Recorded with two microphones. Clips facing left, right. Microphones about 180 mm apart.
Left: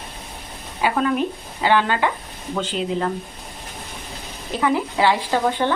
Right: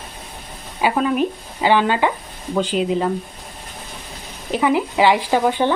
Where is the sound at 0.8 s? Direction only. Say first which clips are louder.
Right 2 dB; 15° right (ahead or behind).